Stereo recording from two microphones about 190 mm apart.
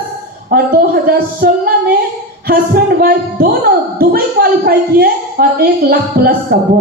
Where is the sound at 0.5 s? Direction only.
50° right (ahead or behind).